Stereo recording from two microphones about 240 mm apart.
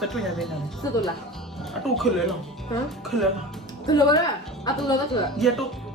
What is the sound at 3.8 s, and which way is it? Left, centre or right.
Speech, centre.